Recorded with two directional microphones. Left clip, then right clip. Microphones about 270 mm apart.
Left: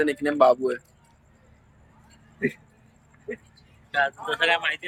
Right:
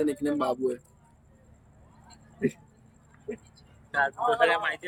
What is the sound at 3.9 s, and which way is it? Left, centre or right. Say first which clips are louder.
Speech: left 1 dB; centre.